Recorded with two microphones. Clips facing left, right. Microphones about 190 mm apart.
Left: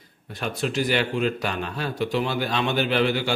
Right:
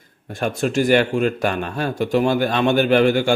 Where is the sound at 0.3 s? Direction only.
50° right (ahead or behind).